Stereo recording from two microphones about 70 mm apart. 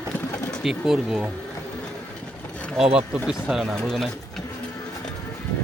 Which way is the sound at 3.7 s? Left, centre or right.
Centre.